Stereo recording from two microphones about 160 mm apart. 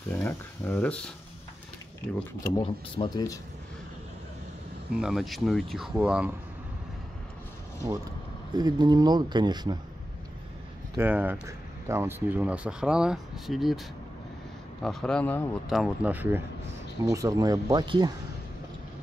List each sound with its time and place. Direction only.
0.1 s speech: 10° left (ahead or behind)
2.5 s speech: 30° left (ahead or behind)
4.9 s speech: 5° right (ahead or behind)
8.5 s speech: 25° right (ahead or behind)
11.0 s speech: 10° right (ahead or behind)
14.8 s speech: centre (ahead or behind)
15.7 s speech: 5° right (ahead or behind); by 18.1 s 25° right (ahead or behind)